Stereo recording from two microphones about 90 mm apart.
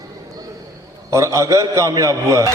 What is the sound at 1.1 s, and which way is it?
A man's voice, 35° right (ahead or behind).